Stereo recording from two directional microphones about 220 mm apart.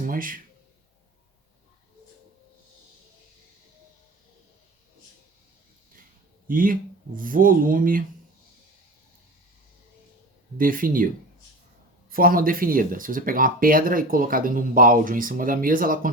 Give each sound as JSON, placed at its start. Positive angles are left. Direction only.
{"t": 0.0, "sound": "speech", "side_deg": -40}
{"t": 6.5, "sound": "speech", "side_deg": -40}
{"t": 10.6, "sound": "speech", "side_deg": -40}
{"t": 12.1, "sound": "speech", "side_deg": -40}